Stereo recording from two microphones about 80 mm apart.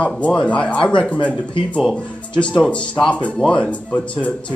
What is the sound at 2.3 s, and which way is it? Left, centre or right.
Speech, centre.